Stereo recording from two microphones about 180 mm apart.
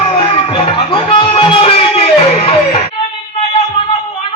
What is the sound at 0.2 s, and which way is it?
Music, 30° left (ahead or behind).